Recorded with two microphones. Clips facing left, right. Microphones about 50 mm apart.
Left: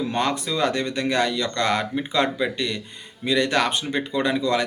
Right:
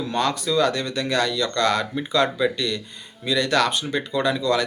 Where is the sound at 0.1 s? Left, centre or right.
Left.